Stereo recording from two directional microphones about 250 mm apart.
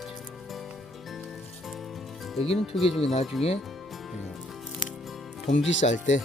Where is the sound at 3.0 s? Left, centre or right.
Left.